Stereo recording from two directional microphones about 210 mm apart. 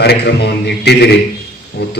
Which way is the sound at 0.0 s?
50° left (ahead or behind).